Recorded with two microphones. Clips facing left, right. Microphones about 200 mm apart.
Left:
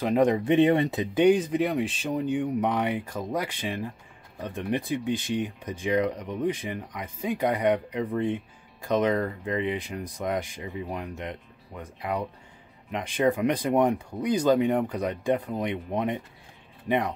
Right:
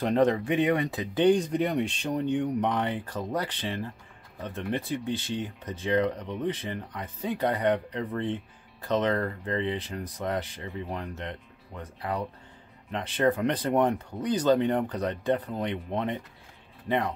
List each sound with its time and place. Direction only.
0.0 s speech: 10° left (ahead or behind)
0.4 s speech: 25° left (ahead or behind)
1.2 s speech: 5° left (ahead or behind)